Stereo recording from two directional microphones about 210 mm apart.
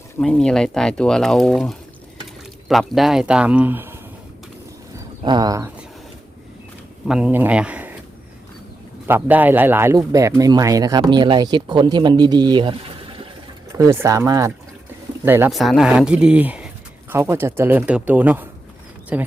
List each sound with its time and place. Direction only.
0.2 s speech: 5° left (ahead or behind)
5.2 s speech: 20° right (ahead or behind)
7.1 s speech: 5° right (ahead or behind)
9.0 s speech: 10° right (ahead or behind)
13.7 s speech: 15° right (ahead or behind)